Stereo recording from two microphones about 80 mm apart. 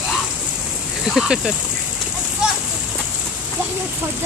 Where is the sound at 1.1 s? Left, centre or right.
Centre.